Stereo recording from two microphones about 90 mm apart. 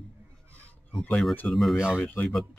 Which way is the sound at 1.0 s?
15° left (ahead or behind).